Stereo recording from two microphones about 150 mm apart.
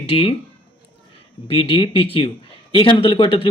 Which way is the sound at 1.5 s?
40° left (ahead or behind).